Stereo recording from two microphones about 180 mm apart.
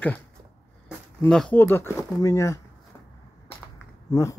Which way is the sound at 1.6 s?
15° left (ahead or behind).